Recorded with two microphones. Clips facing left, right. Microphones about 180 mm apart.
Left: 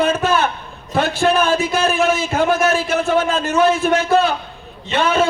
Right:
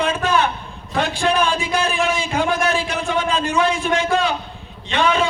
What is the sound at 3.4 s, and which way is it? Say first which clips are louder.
Speech: left 3 dB; 40° left (ahead or behind).